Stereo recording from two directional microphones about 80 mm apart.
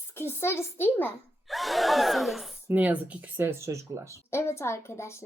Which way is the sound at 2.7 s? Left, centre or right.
Centre.